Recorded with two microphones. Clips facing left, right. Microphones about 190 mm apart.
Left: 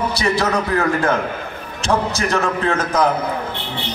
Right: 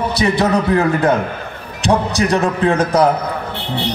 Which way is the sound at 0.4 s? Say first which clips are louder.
Right 5 dB; 20° right (ahead or behind).